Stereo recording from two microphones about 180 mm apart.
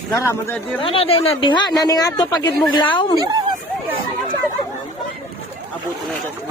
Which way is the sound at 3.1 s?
20° right (ahead or behind).